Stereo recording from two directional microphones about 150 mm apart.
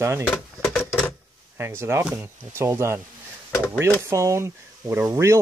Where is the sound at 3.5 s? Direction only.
15° left (ahead or behind).